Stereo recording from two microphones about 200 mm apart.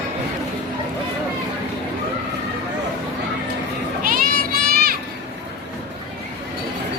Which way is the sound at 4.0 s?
45° right (ahead or behind).